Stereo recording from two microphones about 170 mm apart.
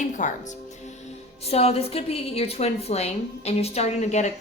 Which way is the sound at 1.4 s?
35° left (ahead or behind).